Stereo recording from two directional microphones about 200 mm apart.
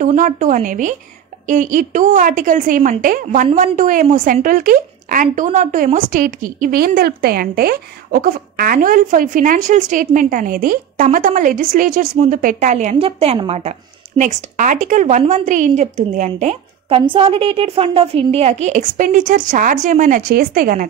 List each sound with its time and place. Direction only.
0.0 s a woman's voice: 40° right (ahead or behind)